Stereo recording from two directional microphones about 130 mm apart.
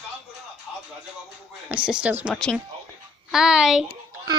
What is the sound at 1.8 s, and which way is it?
Speech, 10° right (ahead or behind).